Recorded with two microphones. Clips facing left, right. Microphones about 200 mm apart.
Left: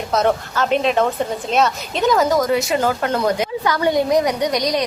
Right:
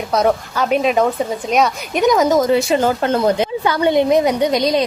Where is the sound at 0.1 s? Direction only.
10° right (ahead or behind).